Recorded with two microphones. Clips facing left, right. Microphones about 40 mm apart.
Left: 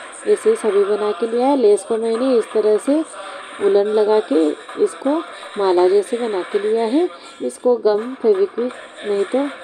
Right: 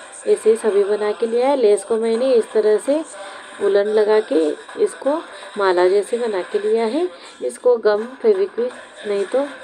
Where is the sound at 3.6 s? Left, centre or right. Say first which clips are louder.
Left 1 dB; left.